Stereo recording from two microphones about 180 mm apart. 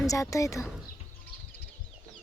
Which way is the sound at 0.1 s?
15° left (ahead or behind).